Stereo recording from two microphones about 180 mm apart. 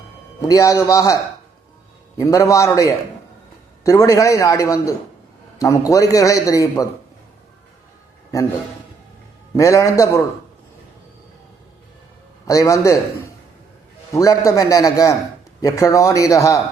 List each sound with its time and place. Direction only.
0.4 s a man's voice: 20° left (ahead or behind)
9.6 s a man's voice: 15° left (ahead or behind)
12.5 s a man's voice: 15° left (ahead or behind)
14.1 s a man's voice: 20° left (ahead or behind)